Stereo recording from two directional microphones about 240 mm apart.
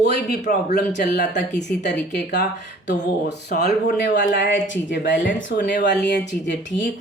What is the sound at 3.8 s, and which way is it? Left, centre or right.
Speech, left.